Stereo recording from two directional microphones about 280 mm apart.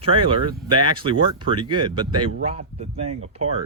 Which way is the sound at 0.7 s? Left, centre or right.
Centre.